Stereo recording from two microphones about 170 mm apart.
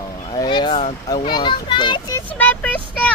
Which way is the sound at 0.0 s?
25° left (ahead or behind).